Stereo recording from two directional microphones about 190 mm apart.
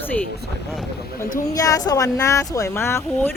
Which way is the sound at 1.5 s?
20° left (ahead or behind).